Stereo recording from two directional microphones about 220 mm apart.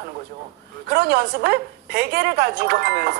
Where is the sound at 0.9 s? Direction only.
45° right (ahead or behind).